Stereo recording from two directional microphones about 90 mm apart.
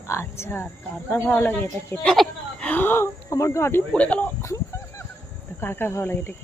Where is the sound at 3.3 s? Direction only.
35° left (ahead or behind).